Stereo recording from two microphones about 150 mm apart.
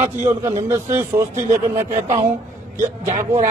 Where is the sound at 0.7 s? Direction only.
15° right (ahead or behind).